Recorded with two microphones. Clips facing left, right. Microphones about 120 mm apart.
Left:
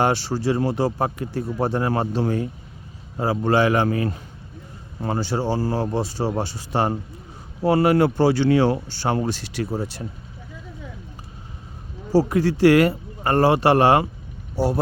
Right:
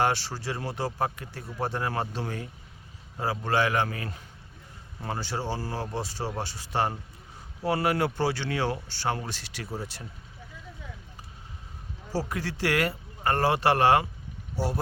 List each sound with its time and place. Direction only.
0.3 s a man's voice: 25° left (ahead or behind)
9.6 s speech: 55° left (ahead or behind)
12.1 s speech: 35° left (ahead or behind)